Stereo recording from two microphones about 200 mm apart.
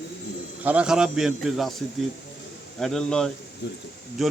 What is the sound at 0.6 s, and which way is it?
A man's voice, 5° right (ahead or behind).